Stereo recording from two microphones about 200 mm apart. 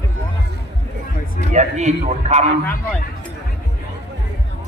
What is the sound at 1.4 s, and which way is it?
A man's voice, 35° right (ahead or behind).